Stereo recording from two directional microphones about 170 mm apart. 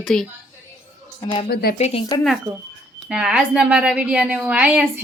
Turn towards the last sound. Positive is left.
turn(degrees=-10)  # may be behind; listen again after turning